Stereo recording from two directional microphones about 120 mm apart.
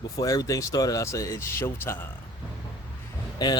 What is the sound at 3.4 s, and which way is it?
Speech, 35° left (ahead or behind).